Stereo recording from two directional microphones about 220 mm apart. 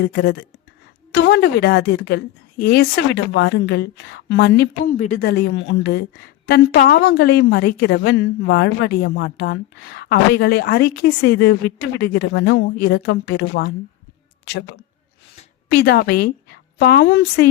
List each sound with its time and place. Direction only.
0.0 s a woman's voice: 50° left (ahead or behind)
15.8 s a woman's voice: 45° left (ahead or behind)